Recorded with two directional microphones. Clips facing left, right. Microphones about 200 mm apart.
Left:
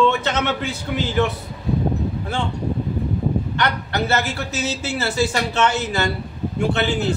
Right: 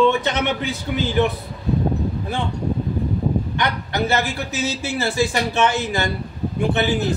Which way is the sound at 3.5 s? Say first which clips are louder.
Even; 15° right (ahead or behind).